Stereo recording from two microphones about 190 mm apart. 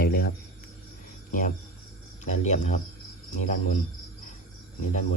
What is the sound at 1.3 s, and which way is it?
Speech, 45° left (ahead or behind).